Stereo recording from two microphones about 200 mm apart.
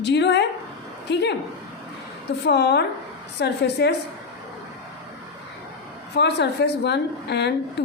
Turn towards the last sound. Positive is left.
turn(degrees=55)  # may be behind; listen again after turning